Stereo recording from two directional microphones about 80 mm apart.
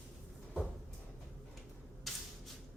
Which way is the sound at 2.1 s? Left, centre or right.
Centre.